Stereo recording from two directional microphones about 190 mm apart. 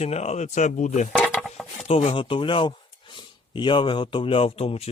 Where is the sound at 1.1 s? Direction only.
5° left (ahead or behind).